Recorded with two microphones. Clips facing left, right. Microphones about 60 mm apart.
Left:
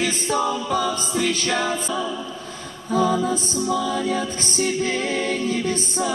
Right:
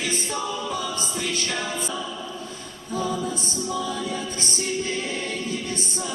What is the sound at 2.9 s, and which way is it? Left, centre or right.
Music, left.